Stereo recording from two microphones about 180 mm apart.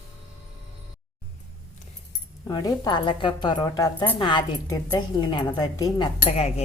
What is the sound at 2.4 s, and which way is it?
A woman's voice, 20° left (ahead or behind).